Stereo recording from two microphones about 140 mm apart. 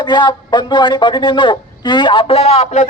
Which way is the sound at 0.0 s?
35° left (ahead or behind).